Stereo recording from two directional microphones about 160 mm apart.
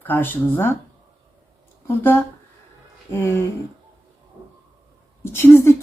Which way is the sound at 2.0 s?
15° left (ahead or behind).